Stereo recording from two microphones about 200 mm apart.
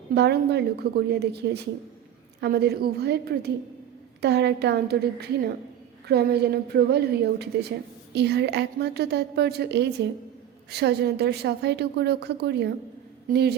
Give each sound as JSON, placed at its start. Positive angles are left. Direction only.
{"t": 0.1, "sound": "a woman's voice", "side_deg": -55}